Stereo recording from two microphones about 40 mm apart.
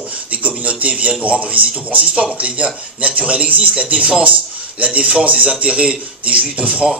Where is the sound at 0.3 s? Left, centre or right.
Right.